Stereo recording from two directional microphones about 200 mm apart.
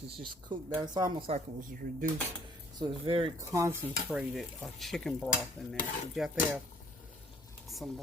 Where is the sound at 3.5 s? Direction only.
15° right (ahead or behind).